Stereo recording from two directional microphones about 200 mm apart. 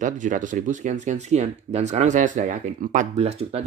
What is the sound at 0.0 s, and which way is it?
Speech, 40° right (ahead or behind).